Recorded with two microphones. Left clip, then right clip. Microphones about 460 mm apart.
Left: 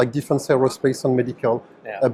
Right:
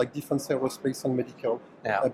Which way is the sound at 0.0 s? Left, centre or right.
Left.